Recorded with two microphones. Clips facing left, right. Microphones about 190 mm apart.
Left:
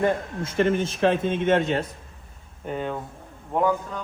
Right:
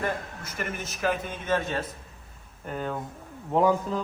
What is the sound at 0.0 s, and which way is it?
A man's voice, 25° left (ahead or behind).